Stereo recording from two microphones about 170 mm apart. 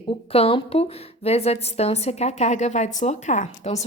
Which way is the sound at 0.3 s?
35° left (ahead or behind).